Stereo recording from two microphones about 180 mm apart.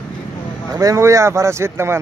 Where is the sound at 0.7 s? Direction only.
15° right (ahead or behind).